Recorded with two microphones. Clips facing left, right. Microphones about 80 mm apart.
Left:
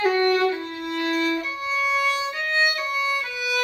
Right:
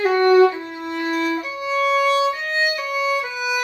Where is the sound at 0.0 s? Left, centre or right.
Centre.